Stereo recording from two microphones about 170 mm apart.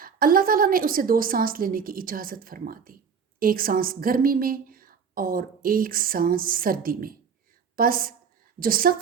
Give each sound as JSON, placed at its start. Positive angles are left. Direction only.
{"t": 0.0, "sound": "a woman's voice", "side_deg": -55}